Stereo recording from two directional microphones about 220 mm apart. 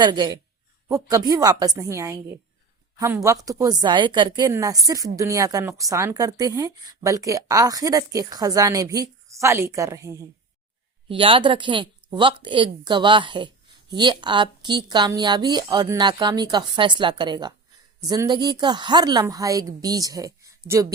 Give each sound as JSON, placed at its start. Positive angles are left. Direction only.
{"t": 0.0, "sound": "a woman's voice", "side_deg": -20}